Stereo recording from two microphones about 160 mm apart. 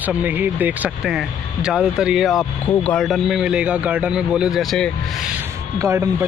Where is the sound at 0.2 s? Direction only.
10° right (ahead or behind).